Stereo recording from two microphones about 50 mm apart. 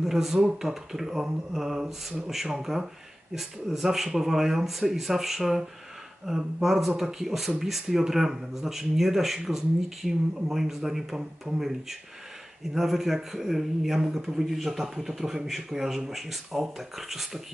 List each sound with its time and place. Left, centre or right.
0.0 s speech: centre
11.5 s speech: centre
12.7 s speech: centre